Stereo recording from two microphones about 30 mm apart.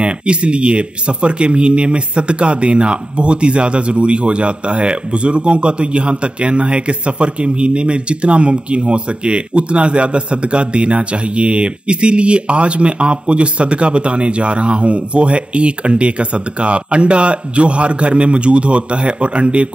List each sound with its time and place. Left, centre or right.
0.0 s speech: right